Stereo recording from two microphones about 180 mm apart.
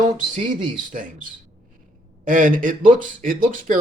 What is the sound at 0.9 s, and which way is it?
Speech, 50° right (ahead or behind).